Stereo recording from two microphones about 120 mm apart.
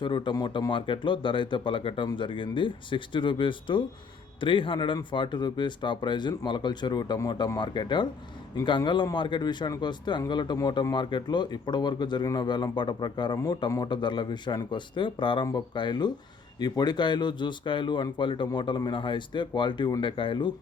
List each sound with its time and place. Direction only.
0.0 s speech: 40° left (ahead or behind)